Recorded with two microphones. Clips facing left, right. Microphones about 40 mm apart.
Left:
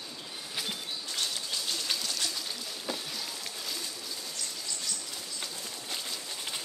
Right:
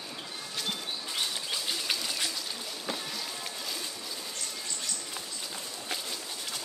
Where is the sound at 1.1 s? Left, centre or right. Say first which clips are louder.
Right 1 dB; centre.